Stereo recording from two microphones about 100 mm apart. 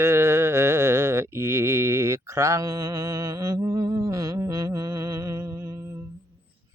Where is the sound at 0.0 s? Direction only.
25° right (ahead or behind).